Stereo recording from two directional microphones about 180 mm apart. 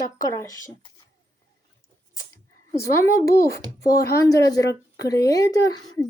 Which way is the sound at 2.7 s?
15° left (ahead or behind).